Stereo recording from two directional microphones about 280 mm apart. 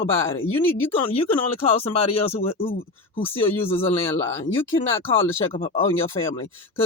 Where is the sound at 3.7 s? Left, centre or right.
Centre.